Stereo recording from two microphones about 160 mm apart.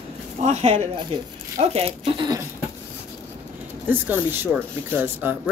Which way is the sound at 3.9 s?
15° right (ahead or behind).